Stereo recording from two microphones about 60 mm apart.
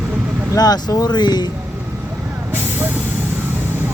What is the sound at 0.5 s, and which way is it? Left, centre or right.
Speech, left.